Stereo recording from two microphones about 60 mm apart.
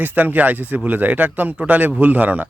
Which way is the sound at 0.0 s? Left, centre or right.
Right.